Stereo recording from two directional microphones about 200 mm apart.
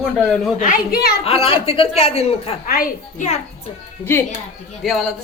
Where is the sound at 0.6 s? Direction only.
45° left (ahead or behind).